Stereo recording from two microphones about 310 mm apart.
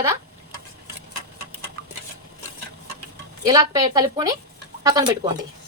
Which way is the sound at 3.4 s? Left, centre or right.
Centre.